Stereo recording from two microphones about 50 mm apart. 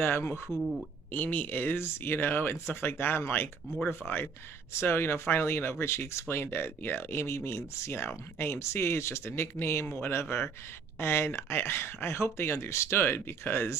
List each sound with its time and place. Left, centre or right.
0.0 s speech: left
0.5 s speech: centre
1.1 s speech: left
12.9 s speech: left